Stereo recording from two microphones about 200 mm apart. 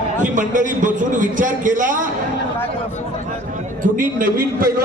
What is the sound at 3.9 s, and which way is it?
Speech, 45° right (ahead or behind).